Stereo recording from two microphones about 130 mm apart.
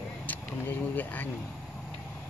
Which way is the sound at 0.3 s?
15° left (ahead or behind).